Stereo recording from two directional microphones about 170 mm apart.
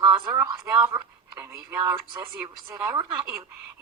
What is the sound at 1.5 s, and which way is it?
Speech, 15° right (ahead or behind).